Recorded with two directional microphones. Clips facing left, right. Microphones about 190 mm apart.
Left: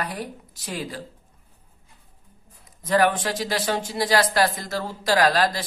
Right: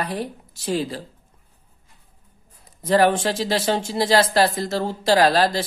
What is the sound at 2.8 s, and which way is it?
Speech, 30° right (ahead or behind).